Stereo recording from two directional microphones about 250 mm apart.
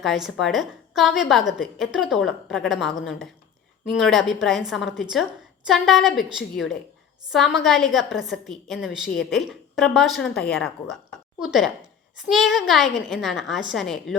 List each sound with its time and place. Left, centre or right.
0.0 s a woman's voice: centre